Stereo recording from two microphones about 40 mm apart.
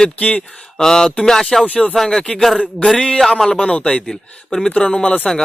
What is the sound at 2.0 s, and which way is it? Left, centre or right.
Speech, centre.